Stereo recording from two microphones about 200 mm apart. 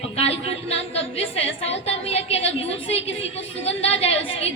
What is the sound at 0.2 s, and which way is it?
A woman's voice, 30° left (ahead or behind).